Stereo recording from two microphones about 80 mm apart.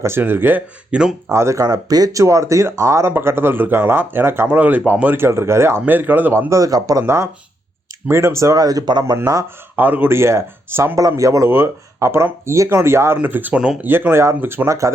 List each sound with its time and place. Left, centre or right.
0.2 s speech: right
0.9 s speech: centre
1.3 s speech: right
1.6 s speech: right
2.2 s speech: right
6.5 s speech: right
7.0 s speech: right
9.2 s speech: right
9.7 s speech: right
11.2 s speech: right